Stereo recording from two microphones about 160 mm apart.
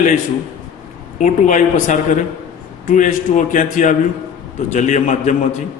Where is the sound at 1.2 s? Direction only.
50° left (ahead or behind).